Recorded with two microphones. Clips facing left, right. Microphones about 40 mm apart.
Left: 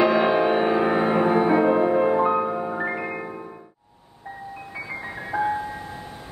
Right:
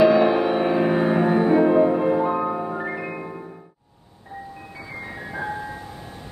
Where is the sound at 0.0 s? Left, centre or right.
Centre.